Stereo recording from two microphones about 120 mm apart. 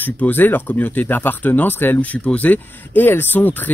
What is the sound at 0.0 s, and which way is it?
Speech, 15° left (ahead or behind).